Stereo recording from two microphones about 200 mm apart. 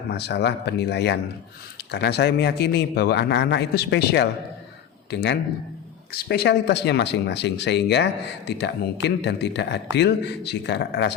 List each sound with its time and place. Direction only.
0.1 s speech: 55° left (ahead or behind)